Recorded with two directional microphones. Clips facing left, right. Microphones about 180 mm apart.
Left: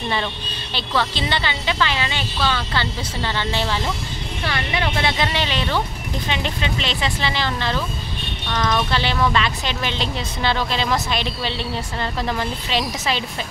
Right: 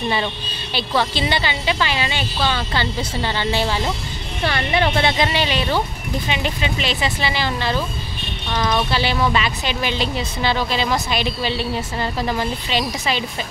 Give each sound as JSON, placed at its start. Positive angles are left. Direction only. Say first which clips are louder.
{"t": 0.7, "sound": "a woman's voice", "louder": "right 2 dB", "side_deg": -10}
{"t": 4.5, "sound": "speech", "louder": "right 5 dB", "side_deg": -30}
{"t": 5.2, "sound": "a woman's voice", "louder": "right 2 dB", "side_deg": -10}